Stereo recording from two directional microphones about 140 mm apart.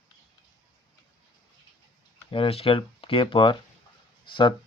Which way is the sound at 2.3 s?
40° left (ahead or behind).